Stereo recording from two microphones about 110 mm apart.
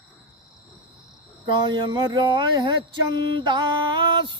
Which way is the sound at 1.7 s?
45° right (ahead or behind).